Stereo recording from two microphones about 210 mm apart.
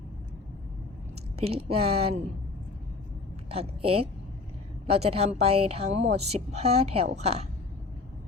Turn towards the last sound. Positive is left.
turn(degrees=-30)  # may be behind; listen again after turning